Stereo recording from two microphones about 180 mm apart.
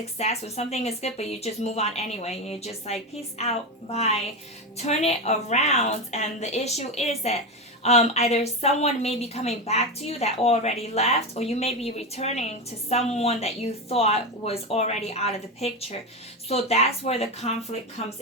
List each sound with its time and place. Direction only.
0.2 s a woman's voice: 35° left (ahead or behind)